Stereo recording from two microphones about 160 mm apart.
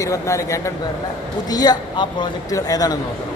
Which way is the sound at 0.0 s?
20° left (ahead or behind).